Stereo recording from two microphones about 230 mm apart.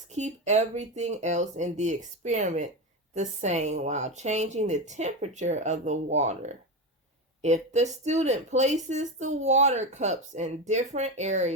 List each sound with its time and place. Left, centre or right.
0.1 s speech: right